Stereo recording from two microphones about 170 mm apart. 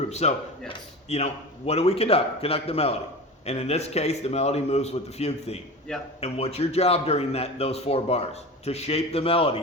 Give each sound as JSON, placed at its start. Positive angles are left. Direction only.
{"t": 0.1, "sound": "a man's voice", "side_deg": 40}